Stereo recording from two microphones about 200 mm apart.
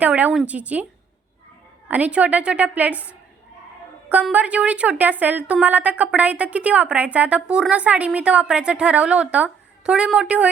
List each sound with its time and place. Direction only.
0.0 s a woman's voice: 10° right (ahead or behind)
1.9 s a woman's voice: 5° right (ahead or behind)